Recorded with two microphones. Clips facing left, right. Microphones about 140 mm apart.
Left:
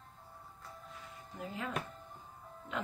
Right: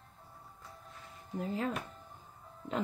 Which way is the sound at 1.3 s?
40° right (ahead or behind).